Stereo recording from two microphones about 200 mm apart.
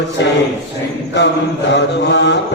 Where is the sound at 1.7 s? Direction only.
60° left (ahead or behind).